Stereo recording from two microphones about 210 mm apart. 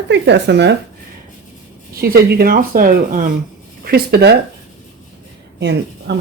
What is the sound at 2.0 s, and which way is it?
Speech, 50° right (ahead or behind).